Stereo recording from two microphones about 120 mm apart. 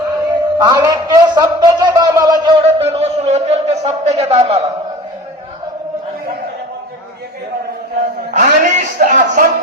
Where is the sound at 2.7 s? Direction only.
55° right (ahead or behind).